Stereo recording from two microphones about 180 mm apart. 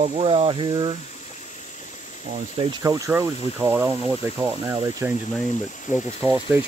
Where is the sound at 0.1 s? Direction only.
30° right (ahead or behind).